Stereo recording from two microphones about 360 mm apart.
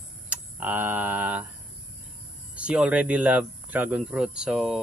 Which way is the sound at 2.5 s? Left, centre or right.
Centre.